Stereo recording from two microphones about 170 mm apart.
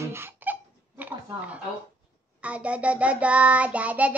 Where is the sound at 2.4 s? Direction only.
10° right (ahead or behind).